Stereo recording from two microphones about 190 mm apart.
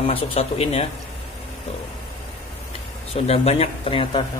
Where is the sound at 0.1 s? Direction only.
30° left (ahead or behind).